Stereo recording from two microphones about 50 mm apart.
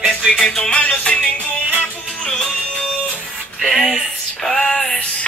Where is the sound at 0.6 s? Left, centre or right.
Left.